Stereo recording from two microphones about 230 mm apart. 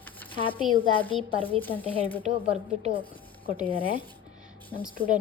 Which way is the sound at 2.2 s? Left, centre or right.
Right.